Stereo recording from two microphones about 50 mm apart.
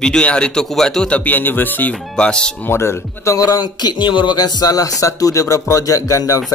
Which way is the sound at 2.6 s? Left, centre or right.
Left.